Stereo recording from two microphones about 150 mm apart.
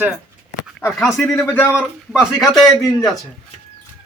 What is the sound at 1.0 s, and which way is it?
Speech, 5° left (ahead or behind).